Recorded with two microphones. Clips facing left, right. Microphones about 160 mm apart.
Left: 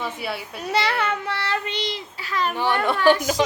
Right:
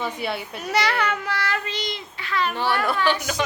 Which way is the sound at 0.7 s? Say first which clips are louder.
Even; 25° left (ahead or behind).